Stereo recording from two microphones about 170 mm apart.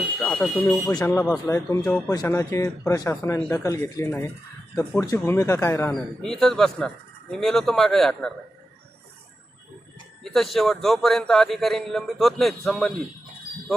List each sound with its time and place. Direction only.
0.2 s a man's voice: 5° left (ahead or behind)
0.9 s speech: 15° left (ahead or behind)
1.8 s a man's voice: 5° left (ahead or behind)
2.0 s speech: 20° left (ahead or behind)
4.7 s speech: 5° left (ahead or behind)
4.9 s speech: 15° left (ahead or behind)
5.9 s a man's voice: 5° left (ahead or behind)
10.2 s a man's voice: centre (ahead or behind)